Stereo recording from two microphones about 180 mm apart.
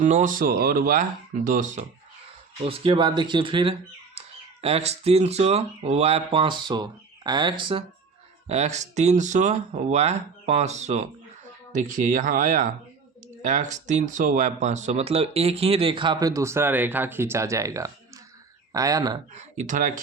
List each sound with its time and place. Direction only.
0.0 s speech: 45° right (ahead or behind)
2.6 s speech: 30° right (ahead or behind)
8.4 s speech: 40° right (ahead or behind); by 19.2 s 20° right (ahead or behind)
19.3 s speech: 40° right (ahead or behind)